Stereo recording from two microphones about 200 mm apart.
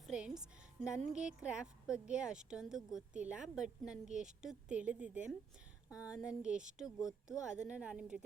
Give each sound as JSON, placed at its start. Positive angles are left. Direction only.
{"t": 0.1, "sound": "a woman's voice", "side_deg": -5}